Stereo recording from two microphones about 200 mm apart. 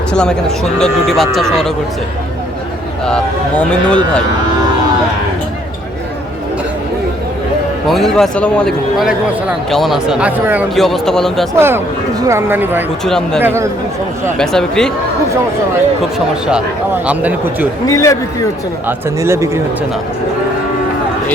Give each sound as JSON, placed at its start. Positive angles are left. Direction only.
{"t": 0.1, "sound": "a man's voice", "side_deg": 5}
{"t": 3.6, "sound": "a man's voice", "side_deg": 5}
{"t": 7.9, "sound": "a man's voice", "side_deg": 0}
{"t": 11.5, "sound": "speech", "side_deg": -10}
{"t": 13.1, "sound": "a man's voice", "side_deg": 5}
{"t": 16.1, "sound": "a man's voice", "side_deg": -5}
{"t": 17.8, "sound": "speech", "side_deg": 15}
{"t": 18.9, "sound": "speech", "side_deg": -15}